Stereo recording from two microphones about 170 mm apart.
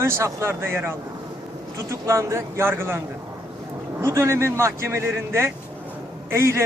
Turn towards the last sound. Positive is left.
turn(degrees=-15)  # may be behind; listen again after turning